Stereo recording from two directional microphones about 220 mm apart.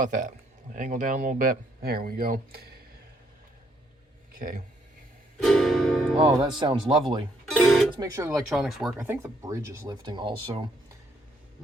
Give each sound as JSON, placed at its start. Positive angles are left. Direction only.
{"t": 0.0, "sound": "speech", "side_deg": -35}
{"t": 4.4, "sound": "speech", "side_deg": -40}
{"t": 5.4, "sound": "speech", "side_deg": 0}
{"t": 6.4, "sound": "speech", "side_deg": -20}
{"t": 7.5, "sound": "speech", "side_deg": 0}
{"t": 7.9, "sound": "speech", "side_deg": -15}
{"t": 8.4, "sound": "speech", "side_deg": 0}